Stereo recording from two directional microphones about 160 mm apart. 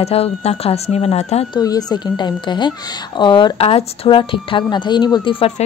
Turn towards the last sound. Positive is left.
turn(degrees=35)  # may be behind; listen again after turning